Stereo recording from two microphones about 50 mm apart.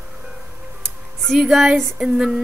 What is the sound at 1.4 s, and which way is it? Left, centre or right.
Speech, centre.